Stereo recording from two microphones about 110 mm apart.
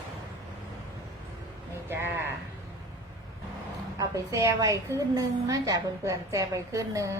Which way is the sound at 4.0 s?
30° right (ahead or behind).